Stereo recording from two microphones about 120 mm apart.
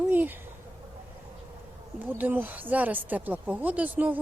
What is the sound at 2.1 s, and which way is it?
Speech, 15° right (ahead or behind).